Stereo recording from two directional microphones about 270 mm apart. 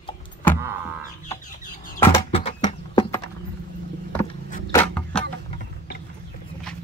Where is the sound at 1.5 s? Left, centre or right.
Left.